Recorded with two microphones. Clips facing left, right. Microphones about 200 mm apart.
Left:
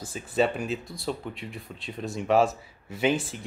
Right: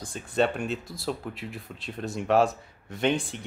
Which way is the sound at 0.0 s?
5° left (ahead or behind).